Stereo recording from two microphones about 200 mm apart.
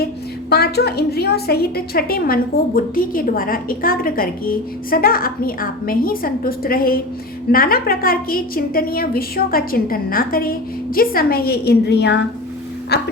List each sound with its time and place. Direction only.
0.5 s a woman's voice: 55° left (ahead or behind)